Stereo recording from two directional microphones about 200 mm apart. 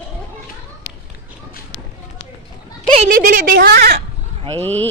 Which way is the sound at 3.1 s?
45° right (ahead or behind).